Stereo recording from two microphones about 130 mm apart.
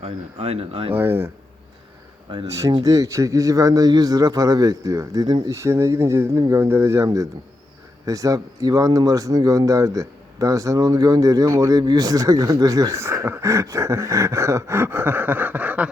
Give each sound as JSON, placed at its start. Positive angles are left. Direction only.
{"t": 0.0, "sound": "speech", "side_deg": -50}
{"t": 0.9, "sound": "speech", "side_deg": -20}
{"t": 2.5, "sound": "speech", "side_deg": -25}